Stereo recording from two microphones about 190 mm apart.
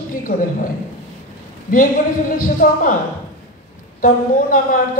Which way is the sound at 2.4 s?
45° left (ahead or behind).